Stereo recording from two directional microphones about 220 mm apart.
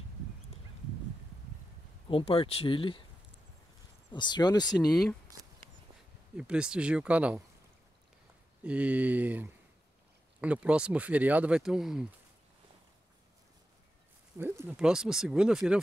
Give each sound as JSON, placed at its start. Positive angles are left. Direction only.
{"t": 2.0, "sound": "speech", "side_deg": 25}
{"t": 4.1, "sound": "speech", "side_deg": 20}
{"t": 4.7, "sound": "speech", "side_deg": 0}
{"t": 6.3, "sound": "speech", "side_deg": -5}
{"t": 8.6, "sound": "speech", "side_deg": -5}
{"t": 14.4, "sound": "speech", "side_deg": -10}